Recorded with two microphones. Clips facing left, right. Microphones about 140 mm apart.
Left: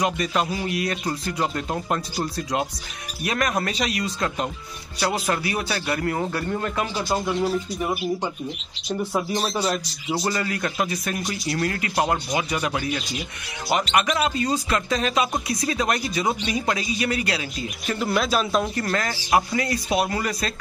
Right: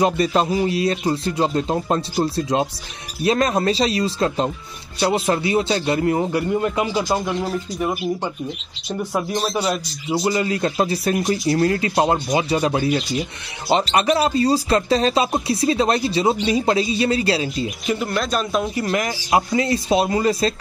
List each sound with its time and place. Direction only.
0.0 s speech: 30° right (ahead or behind); by 7.2 s 15° right (ahead or behind)
7.2 s speech: centre (ahead or behind)
10.2 s speech: 20° right (ahead or behind)
17.8 s speech: centre (ahead or behind)
18.9 s speech: 15° right (ahead or behind)